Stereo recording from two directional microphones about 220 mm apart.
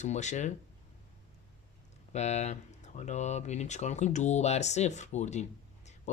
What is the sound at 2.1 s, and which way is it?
Speech, 30° left (ahead or behind).